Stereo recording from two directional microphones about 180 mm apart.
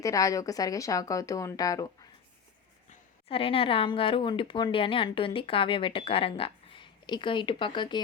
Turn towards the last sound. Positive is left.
turn(degrees=25)  # may be behind; listen again after turning